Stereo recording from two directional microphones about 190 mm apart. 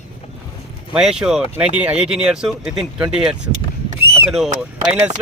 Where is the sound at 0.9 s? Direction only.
5° right (ahead or behind).